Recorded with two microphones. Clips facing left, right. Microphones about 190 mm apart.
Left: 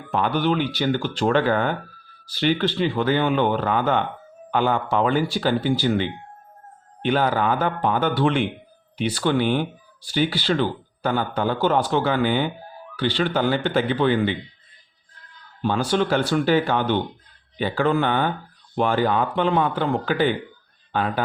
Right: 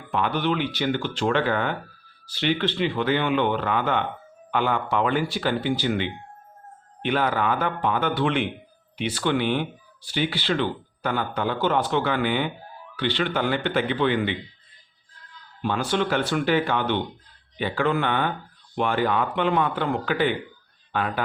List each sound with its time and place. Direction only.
0.1 s speech: 40° left (ahead or behind)
15.6 s speech: 35° left (ahead or behind)